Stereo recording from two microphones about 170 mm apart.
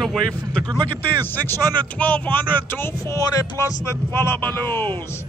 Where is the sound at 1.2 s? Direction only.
10° left (ahead or behind).